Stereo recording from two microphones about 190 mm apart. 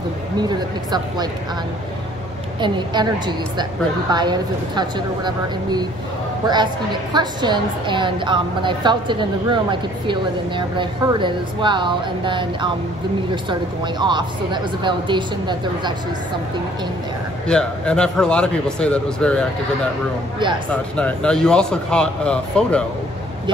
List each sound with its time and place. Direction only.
0.4 s a woman's voice: 20° right (ahead or behind)
2.6 s a woman's voice: 25° right (ahead or behind)
17.5 s speech: 5° left (ahead or behind)
20.7 s speech: 5° left (ahead or behind)